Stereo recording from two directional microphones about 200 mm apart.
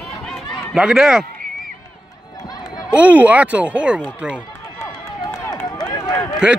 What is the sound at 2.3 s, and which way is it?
Run, 20° left (ahead or behind).